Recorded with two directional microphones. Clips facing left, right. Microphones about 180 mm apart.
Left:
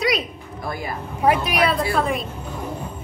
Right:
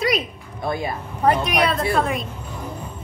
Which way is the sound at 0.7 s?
25° right (ahead or behind).